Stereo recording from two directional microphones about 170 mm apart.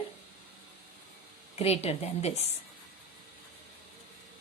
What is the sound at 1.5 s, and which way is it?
Speech, 40° left (ahead or behind).